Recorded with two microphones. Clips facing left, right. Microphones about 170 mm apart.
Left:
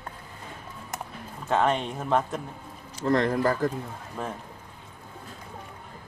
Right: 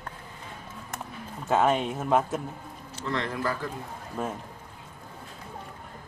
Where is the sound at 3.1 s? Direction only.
45° left (ahead or behind).